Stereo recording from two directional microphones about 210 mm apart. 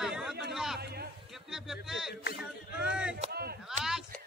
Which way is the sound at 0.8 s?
50° right (ahead or behind).